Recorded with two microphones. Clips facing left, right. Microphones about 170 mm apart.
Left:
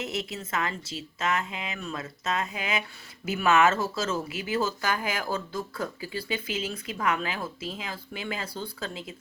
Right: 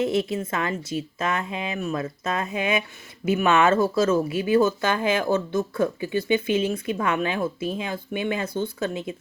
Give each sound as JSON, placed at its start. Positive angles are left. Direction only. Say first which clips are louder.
{"t": 0.0, "sound": "speech", "louder": "right 10 dB", "side_deg": -25}